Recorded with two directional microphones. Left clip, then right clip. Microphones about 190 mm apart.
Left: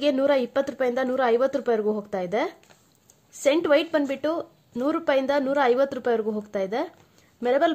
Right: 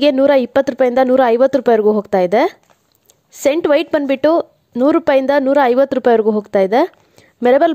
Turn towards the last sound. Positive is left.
turn(degrees=-50)  # may be behind; listen again after turning